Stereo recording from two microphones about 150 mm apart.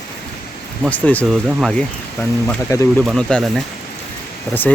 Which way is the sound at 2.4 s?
15° left (ahead or behind).